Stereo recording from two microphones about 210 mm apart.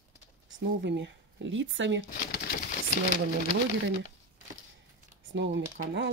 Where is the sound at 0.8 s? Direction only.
55° right (ahead or behind).